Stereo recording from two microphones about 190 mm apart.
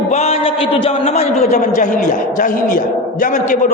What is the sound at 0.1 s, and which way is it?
A man's voice, 35° left (ahead or behind).